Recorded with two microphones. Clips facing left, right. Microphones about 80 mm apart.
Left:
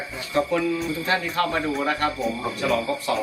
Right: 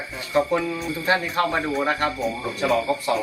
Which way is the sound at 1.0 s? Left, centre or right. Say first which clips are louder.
Right 4 dB; right.